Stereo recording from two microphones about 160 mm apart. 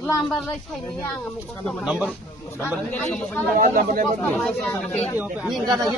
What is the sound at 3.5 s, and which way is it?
Speech, 55° right (ahead or behind).